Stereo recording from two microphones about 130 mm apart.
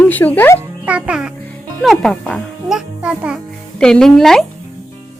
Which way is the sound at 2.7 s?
5° right (ahead or behind).